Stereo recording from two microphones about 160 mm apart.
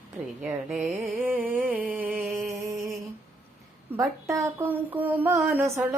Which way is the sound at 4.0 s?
20° right (ahead or behind).